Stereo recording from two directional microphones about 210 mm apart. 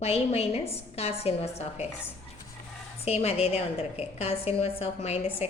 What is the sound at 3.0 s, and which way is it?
A woman's voice, 30° left (ahead or behind).